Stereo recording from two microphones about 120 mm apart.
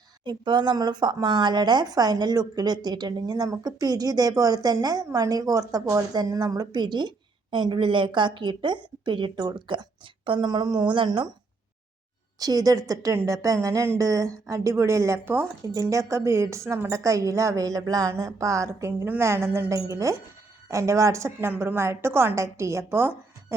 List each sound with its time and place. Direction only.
0.3 s speech: 40° right (ahead or behind)
12.4 s a woman's voice: 30° right (ahead or behind)